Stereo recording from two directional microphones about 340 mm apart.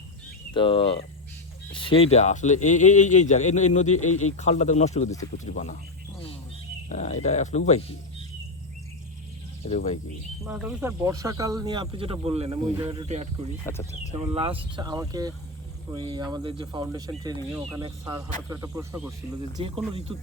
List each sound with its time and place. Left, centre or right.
0.5 s speech: centre
4.1 s a man's voice: left
4.4 s speech: centre
6.8 s speech: centre
9.6 s speech: centre
10.4 s speech: centre